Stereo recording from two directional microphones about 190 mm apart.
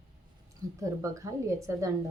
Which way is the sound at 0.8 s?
15° right (ahead or behind).